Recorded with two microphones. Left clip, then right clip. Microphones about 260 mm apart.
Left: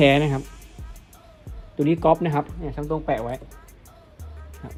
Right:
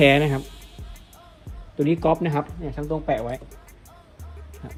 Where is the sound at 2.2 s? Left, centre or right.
Left.